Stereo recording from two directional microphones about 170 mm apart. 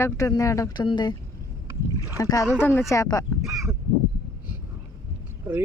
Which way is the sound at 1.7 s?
15° right (ahead or behind).